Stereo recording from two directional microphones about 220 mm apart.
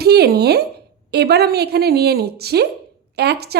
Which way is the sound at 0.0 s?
45° right (ahead or behind).